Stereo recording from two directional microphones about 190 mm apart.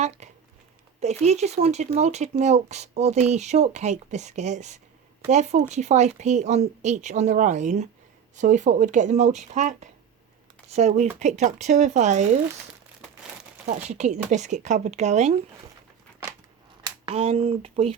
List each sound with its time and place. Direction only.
0.0 s a sound: 35° right (ahead or behind)
0.9 s speech: 35° right (ahead or behind)
13.7 s speech: 35° right (ahead or behind)
16.8 s speech: 30° right (ahead or behind)